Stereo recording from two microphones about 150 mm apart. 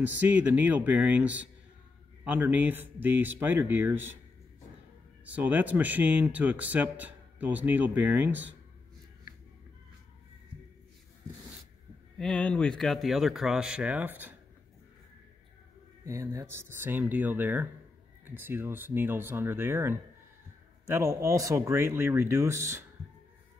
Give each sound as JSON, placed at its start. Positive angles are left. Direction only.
{"t": 0.0, "sound": "speech", "side_deg": -10}
{"t": 5.2, "sound": "speech", "side_deg": -10}
{"t": 12.2, "sound": "speech", "side_deg": 5}
{"t": 16.1, "sound": "speech", "side_deg": -20}